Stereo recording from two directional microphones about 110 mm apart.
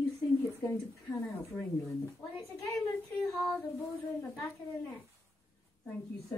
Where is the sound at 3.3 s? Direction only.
Centre (ahead or behind).